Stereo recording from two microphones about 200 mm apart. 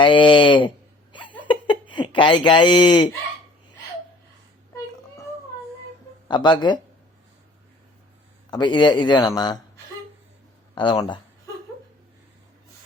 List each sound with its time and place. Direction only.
0.0 s a man's voice: 25° left (ahead or behind)
1.4 s a sound: 25° left (ahead or behind)
1.9 s speech: 25° left (ahead or behind)
6.2 s a man's voice: 20° left (ahead or behind)
8.4 s a man's voice: 20° left (ahead or behind)
10.8 s a man's voice: 25° left (ahead or behind)